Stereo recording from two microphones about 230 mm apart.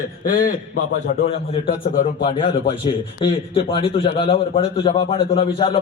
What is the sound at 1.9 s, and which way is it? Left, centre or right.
Speech, left.